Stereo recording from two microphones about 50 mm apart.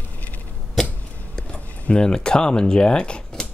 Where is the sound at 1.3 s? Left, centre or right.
Left.